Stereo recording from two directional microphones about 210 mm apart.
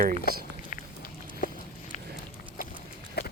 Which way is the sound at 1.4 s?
40° left (ahead or behind).